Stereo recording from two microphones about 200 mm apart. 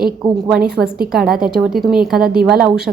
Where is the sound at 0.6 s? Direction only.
50° right (ahead or behind).